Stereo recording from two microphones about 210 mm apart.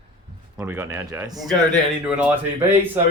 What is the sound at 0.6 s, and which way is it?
Speech, 10° right (ahead or behind).